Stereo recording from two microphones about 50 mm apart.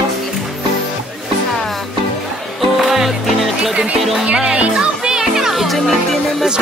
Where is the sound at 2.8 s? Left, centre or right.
Centre.